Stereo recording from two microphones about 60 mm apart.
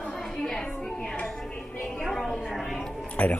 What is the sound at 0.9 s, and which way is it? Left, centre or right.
Music, centre.